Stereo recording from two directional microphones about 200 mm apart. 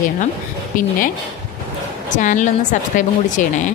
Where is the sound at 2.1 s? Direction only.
40° left (ahead or behind).